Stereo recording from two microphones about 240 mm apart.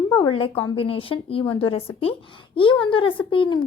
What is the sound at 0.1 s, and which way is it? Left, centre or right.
A woman's voice, centre.